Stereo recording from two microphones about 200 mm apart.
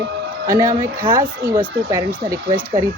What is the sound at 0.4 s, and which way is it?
Speech, 15° right (ahead or behind).